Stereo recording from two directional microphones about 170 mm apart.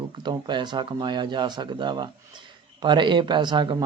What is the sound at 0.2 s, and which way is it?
Speech, 25° right (ahead or behind).